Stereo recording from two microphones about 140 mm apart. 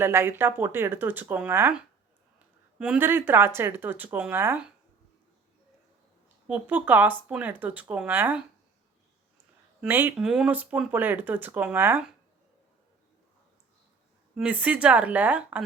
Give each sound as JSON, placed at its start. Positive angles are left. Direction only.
{"t": 0.0, "sound": "speech", "side_deg": -15}
{"t": 2.7, "sound": "speech", "side_deg": -5}
{"t": 6.5, "sound": "speech", "side_deg": -10}
{"t": 9.8, "sound": "speech", "side_deg": -15}
{"t": 14.3, "sound": "speech", "side_deg": -10}